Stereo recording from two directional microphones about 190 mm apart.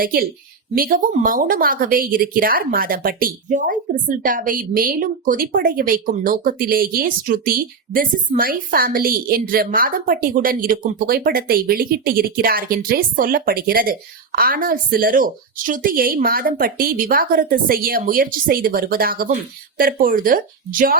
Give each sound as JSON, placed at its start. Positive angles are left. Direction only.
{"t": 0.0, "sound": "speech", "side_deg": -50}